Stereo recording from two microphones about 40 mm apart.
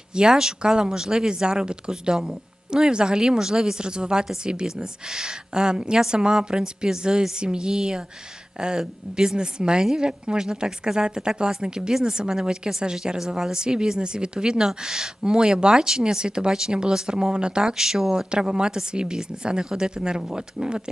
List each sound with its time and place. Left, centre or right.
0.1 s a woman's voice: centre
17.7 s speech: centre